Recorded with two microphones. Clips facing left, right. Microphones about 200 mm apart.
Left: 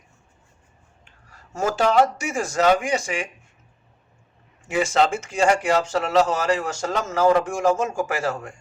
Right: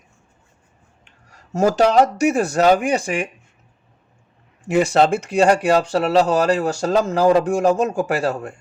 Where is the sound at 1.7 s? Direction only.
40° right (ahead or behind).